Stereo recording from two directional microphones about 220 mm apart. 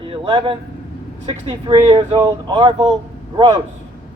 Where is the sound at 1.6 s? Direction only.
20° right (ahead or behind).